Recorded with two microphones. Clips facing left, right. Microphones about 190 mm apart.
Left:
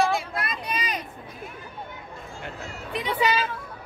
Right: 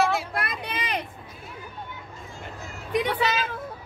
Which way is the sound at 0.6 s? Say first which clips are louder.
Even; 60° right (ahead or behind).